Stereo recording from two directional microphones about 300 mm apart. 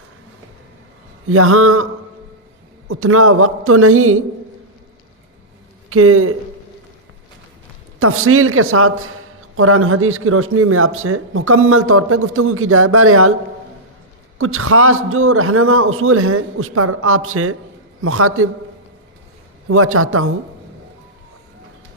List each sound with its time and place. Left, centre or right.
1.3 s a man's voice: right
2.9 s a man's voice: right
5.9 s a man's voice: right
7.9 s a man's voice: right
14.3 s a man's voice: right
19.6 s a man's voice: right